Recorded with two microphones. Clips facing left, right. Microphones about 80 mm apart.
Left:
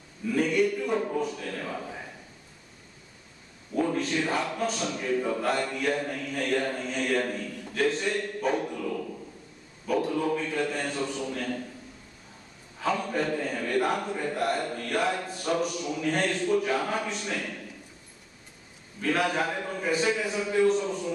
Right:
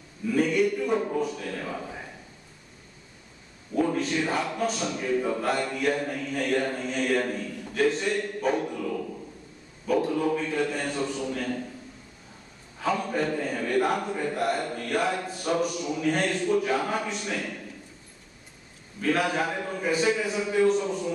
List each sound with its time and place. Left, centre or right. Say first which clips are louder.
0.3 s mantra: right 1 dB; centre
3.7 s a man's voice: right 1 dB; centre
4.5 s mantra: right 1 dB; centre
10.0 s a man's voice: right 2 dB; centre
12.8 s a man's voice: right 1 dB; centre
18.9 s mantra: right 1 dB; centre
20.8 s a man's voice: right 2 dB; centre